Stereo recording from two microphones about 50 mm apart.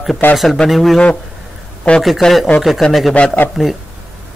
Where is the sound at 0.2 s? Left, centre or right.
Left.